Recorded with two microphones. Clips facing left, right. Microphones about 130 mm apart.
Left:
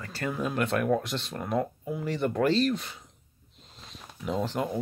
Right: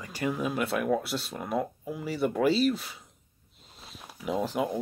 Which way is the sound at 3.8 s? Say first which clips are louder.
Even; 10° right (ahead or behind).